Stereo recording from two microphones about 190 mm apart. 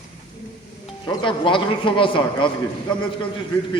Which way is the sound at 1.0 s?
25° left (ahead or behind).